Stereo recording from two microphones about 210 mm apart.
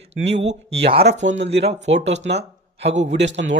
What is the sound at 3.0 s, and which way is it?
Speech, 55° right (ahead or behind).